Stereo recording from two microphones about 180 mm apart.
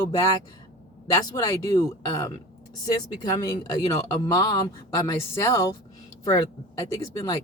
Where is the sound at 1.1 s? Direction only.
20° left (ahead or behind).